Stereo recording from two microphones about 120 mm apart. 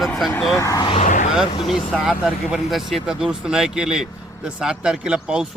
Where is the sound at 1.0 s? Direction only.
90° left.